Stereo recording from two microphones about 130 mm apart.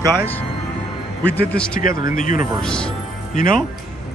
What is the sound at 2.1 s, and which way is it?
Speech, 85° left.